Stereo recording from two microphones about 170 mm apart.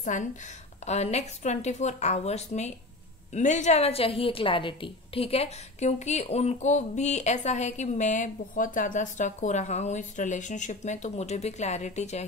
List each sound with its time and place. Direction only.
0.0 s a woman's voice: 50° left (ahead or behind)